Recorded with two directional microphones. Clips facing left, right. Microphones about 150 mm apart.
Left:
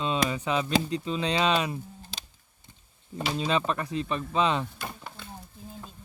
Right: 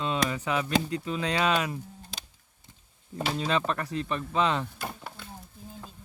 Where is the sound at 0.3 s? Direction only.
20° left (ahead or behind).